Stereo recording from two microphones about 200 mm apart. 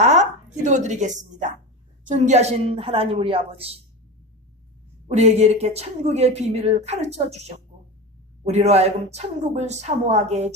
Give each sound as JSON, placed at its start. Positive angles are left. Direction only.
{"t": 0.0, "sound": "a sound", "side_deg": -35}
{"t": 2.0, "sound": "a woman's voice", "side_deg": -35}
{"t": 5.0, "sound": "speech", "side_deg": -30}